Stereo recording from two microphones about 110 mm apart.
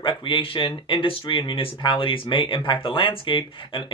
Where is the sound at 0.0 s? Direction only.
50° left (ahead or behind).